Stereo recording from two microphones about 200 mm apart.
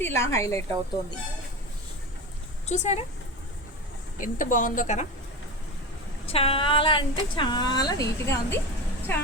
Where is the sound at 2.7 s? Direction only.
35° left (ahead or behind).